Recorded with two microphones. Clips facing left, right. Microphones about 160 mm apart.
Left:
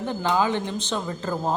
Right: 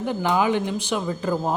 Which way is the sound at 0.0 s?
15° right (ahead or behind).